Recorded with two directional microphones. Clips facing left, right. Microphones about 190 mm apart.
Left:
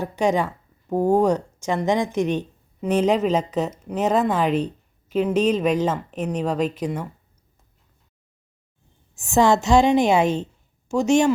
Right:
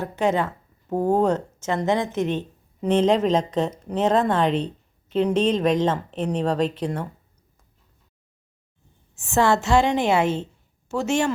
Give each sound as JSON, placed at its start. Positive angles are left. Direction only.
{"t": 0.0, "sound": "speech", "side_deg": 15}
{"t": 9.1, "sound": "a woman's voice", "side_deg": 15}